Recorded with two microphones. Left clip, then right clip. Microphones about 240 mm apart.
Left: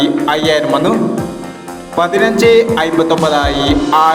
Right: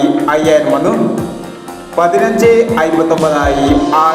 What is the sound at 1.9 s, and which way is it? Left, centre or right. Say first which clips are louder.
Speech: right 1 dB; left.